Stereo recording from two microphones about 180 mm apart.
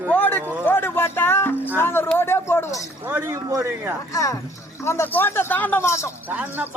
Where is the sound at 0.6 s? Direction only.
10° left (ahead or behind).